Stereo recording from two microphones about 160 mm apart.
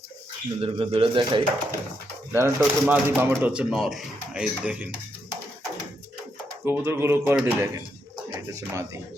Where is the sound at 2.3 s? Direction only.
15° right (ahead or behind).